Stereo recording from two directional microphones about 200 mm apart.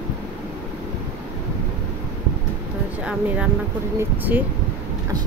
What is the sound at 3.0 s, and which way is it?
Speech, 5° right (ahead or behind).